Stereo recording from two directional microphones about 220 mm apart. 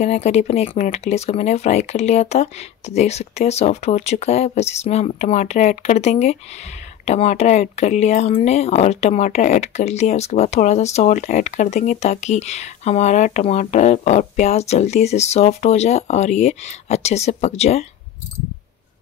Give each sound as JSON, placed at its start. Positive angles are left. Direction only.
{"t": 0.0, "sound": "speech", "side_deg": 30}